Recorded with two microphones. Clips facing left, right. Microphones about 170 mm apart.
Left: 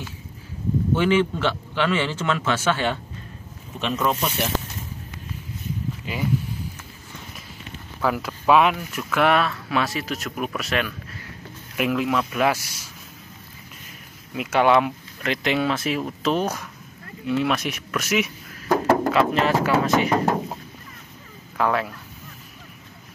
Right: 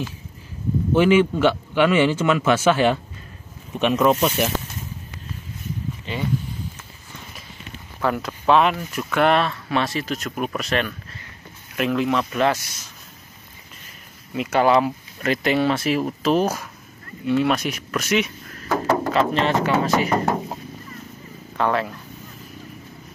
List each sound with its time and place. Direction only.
0.9 s a man's voice: 10° right (ahead or behind)
6.1 s speech: 5° left (ahead or behind)
8.0 s speech: 5° left (ahead or behind)
14.3 s speech: 5° left (ahead or behind)
21.5 s speech: centre (ahead or behind)